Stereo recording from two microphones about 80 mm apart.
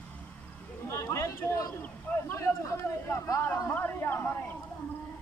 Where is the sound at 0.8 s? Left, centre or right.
Left.